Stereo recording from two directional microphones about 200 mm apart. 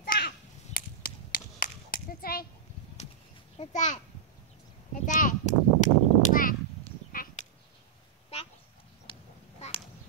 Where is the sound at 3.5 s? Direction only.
40° left (ahead or behind).